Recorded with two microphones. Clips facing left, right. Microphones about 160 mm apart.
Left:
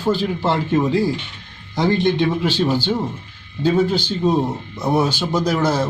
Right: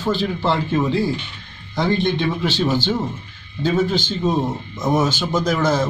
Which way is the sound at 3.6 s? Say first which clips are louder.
Left 2 dB; 10° left (ahead or behind).